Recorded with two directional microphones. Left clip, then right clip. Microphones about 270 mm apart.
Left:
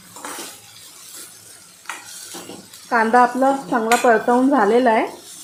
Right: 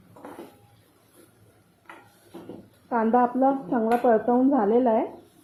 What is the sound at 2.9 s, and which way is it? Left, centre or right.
Speech, centre.